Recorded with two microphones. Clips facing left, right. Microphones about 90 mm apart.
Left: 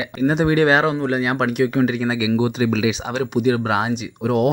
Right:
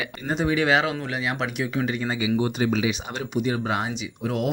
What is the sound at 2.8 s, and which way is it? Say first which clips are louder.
Speech: left 6 dB; 80° left.